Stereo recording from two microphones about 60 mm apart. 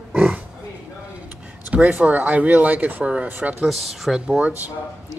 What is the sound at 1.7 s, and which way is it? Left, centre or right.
Speech, right.